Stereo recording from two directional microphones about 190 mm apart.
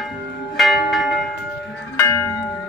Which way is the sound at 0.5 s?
Centre (ahead or behind).